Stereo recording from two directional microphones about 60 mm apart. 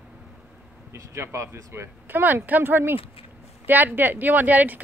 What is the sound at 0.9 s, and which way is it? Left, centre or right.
Speech, right.